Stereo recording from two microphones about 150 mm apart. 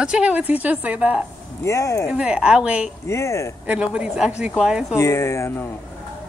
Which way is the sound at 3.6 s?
5° right (ahead or behind).